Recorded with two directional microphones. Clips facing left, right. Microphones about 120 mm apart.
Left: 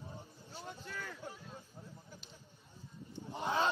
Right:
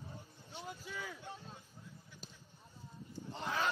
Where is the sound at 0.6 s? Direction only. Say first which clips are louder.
Right 1 dB; 5° right (ahead or behind).